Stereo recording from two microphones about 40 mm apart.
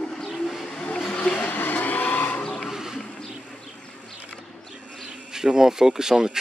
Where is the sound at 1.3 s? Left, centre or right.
Left.